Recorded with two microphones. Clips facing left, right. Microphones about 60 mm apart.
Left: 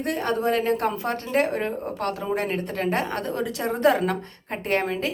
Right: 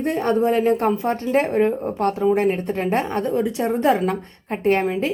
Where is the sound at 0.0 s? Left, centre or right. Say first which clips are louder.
Right 5 dB; right.